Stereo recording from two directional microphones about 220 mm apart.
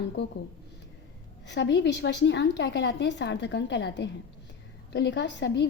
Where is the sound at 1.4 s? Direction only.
55° left (ahead or behind).